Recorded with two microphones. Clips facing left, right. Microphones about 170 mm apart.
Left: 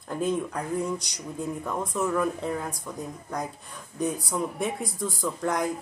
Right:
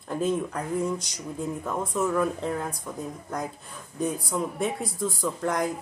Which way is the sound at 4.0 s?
Centre (ahead or behind).